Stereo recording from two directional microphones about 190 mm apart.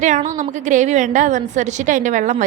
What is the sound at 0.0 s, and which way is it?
A woman's voice, 40° right (ahead or behind).